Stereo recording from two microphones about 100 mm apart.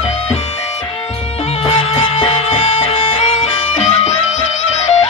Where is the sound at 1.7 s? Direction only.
90° left.